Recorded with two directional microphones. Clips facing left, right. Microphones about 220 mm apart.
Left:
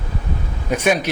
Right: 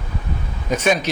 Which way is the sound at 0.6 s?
10° left (ahead or behind).